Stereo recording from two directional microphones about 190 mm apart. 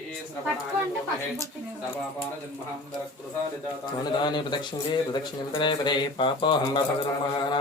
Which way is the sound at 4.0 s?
20° left (ahead or behind).